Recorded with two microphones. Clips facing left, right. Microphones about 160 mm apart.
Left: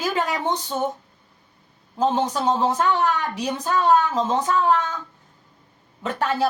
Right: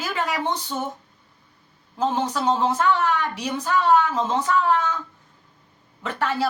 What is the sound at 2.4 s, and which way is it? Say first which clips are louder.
A woman's voice: right 1 dB; 20° left (ahead or behind).